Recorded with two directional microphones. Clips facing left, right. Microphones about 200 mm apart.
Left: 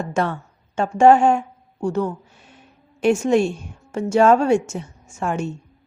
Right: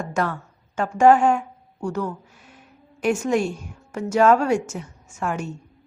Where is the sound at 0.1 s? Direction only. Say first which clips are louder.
Left 2 dB; 25° left (ahead or behind).